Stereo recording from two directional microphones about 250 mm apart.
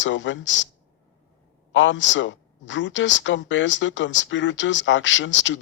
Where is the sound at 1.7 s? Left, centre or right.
Left.